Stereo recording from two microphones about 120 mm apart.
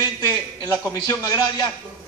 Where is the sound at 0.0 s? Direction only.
30° left (ahead or behind).